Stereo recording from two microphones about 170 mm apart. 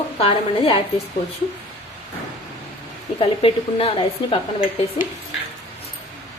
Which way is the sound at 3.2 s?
35° left (ahead or behind).